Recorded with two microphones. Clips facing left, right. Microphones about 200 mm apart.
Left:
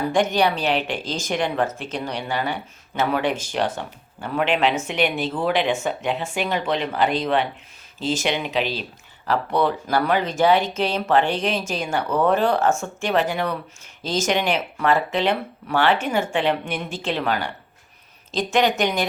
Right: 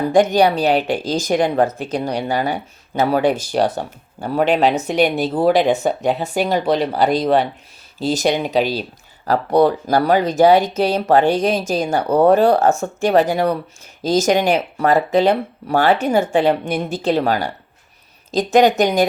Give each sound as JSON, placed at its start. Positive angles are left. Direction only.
{"t": 0.1, "sound": "a woman's voice", "side_deg": -40}